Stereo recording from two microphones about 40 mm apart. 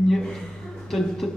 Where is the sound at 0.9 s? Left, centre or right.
Centre.